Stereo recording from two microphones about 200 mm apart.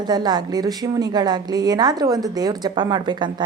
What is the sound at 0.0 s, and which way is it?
A woman's voice, 20° right (ahead or behind).